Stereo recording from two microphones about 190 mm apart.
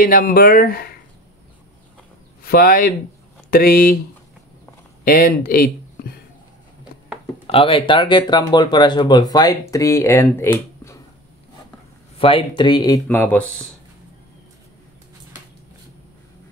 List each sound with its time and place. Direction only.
0.0 s speech: 50° left (ahead or behind)
2.4 s speech: 50° left (ahead or behind)
5.0 s speech: 50° left (ahead or behind)
7.4 s speech: 30° left (ahead or behind); by 10.5 s 15° left (ahead or behind)
10.5 s a sound: 15° left (ahead or behind)
12.2 s speech: 30° left (ahead or behind); by 13.7 s 5° left (ahead or behind)